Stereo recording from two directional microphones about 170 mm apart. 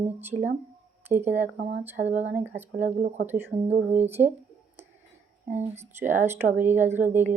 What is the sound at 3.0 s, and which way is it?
Speech, 45° right (ahead or behind).